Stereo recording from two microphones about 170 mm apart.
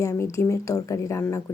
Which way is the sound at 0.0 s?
20° left (ahead or behind).